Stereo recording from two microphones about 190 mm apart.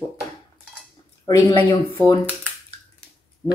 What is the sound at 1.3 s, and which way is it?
Speech, 15° left (ahead or behind).